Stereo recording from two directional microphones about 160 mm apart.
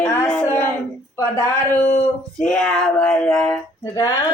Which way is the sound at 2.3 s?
5° left (ahead or behind).